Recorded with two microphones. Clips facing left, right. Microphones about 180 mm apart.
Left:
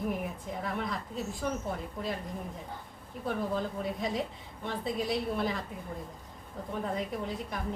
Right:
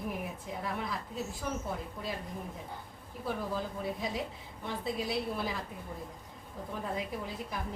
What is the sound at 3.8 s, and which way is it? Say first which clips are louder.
A woman's voice: left 3 dB; centre (ahead or behind).